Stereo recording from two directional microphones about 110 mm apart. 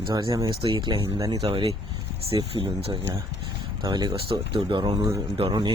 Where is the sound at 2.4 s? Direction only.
40° right (ahead or behind).